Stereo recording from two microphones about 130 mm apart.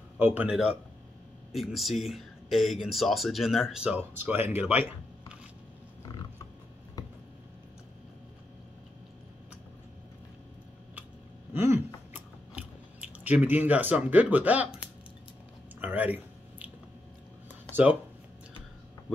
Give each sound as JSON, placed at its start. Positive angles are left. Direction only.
{"t": 0.2, "sound": "speech", "side_deg": -15}
{"t": 11.5, "sound": "chewing", "side_deg": -20}
{"t": 15.8, "sound": "a sound", "side_deg": -15}
{"t": 17.8, "sound": "speech", "side_deg": -10}